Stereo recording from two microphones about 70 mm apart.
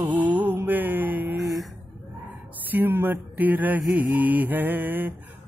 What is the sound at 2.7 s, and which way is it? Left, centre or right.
Mantra, right.